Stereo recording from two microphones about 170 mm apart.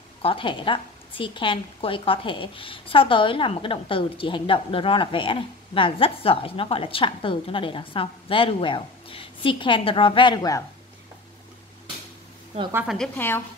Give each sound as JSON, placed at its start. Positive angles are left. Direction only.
{"t": 0.2, "sound": "a woman's voice", "side_deg": 30}
{"t": 12.7, "sound": "a woman's voice", "side_deg": 0}